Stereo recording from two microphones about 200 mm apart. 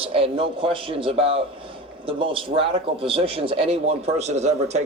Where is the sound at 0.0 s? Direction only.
30° right (ahead or behind).